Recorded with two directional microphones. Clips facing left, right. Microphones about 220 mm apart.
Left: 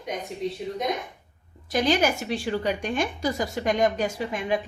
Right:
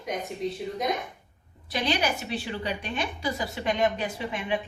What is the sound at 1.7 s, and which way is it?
A woman's voice, 45° left (ahead or behind).